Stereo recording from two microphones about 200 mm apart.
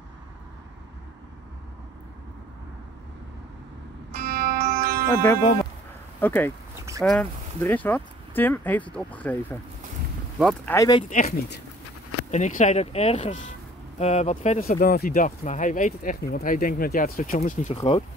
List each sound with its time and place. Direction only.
4.2 s music: 50° right (ahead or behind)
5.1 s speech: 15° left (ahead or behind)
11.0 s speech: 40° left (ahead or behind)